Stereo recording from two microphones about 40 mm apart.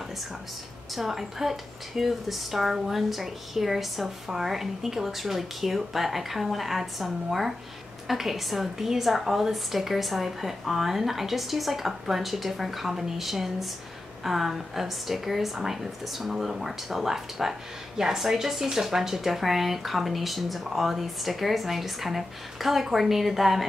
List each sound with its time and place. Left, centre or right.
0.9 s speech: centre